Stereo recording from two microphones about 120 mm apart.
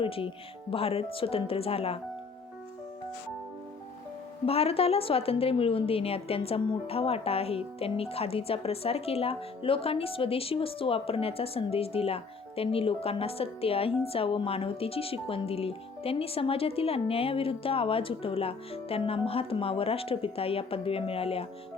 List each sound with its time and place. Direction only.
0.0 s a woman's voice: 50° left (ahead or behind)
4.4 s a woman's voice: 55° left (ahead or behind)